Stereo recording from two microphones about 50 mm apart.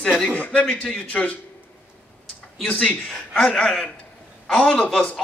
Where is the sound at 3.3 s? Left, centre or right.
Centre.